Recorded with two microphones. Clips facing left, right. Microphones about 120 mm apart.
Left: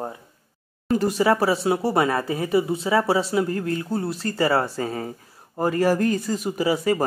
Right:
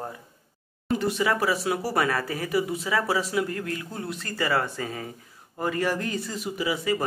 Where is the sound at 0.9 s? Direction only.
40° left (ahead or behind).